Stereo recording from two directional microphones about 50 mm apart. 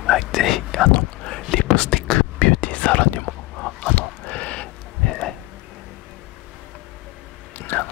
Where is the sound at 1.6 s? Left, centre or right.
Centre.